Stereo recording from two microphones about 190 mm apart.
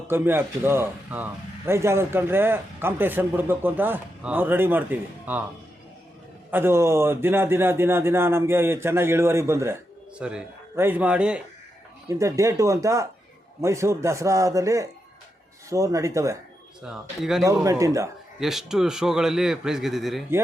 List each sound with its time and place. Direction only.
0.1 s speech: 10° right (ahead or behind)
6.5 s speech: 10° right (ahead or behind)
12.0 s speech: 15° right (ahead or behind)
16.8 s a man's voice: centre (ahead or behind)
17.4 s speech: 15° right (ahead or behind)
18.3 s a man's voice: centre (ahead or behind)